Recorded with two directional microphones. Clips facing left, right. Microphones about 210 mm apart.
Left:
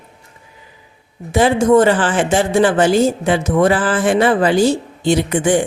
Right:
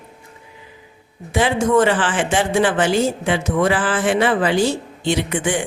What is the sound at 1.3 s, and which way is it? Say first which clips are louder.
Speech: left 5 dB; 40° left (ahead or behind).